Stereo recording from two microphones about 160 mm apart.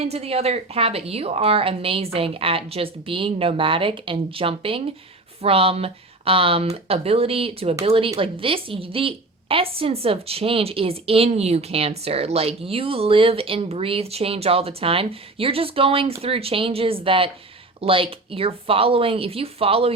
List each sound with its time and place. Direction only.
0.0 s a woman's voice: 40° right (ahead or behind)